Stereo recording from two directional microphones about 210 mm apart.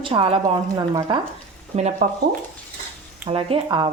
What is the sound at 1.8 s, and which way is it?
Speech, 35° right (ahead or behind).